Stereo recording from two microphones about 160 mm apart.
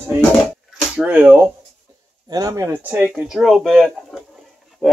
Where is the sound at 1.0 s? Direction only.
5° right (ahead or behind).